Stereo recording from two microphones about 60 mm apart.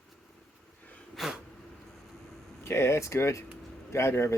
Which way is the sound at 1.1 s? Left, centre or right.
Centre.